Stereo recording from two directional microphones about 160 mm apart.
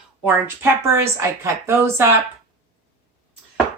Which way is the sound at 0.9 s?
15° right (ahead or behind).